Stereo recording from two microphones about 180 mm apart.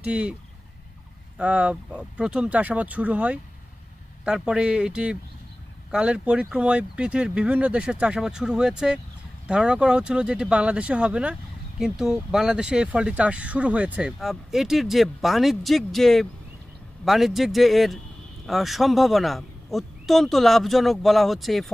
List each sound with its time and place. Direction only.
0.0 s speech: 5° right (ahead or behind)
1.4 s speech: 5° right (ahead or behind)